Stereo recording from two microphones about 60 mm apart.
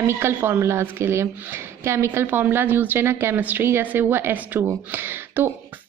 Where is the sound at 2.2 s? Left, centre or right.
Right.